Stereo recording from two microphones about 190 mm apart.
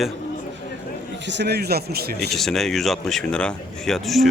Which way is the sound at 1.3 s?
60° right (ahead or behind).